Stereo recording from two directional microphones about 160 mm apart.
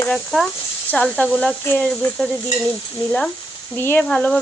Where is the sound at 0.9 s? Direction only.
5° left (ahead or behind).